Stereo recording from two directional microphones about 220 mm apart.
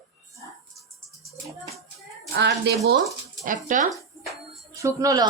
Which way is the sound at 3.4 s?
35° right (ahead or behind).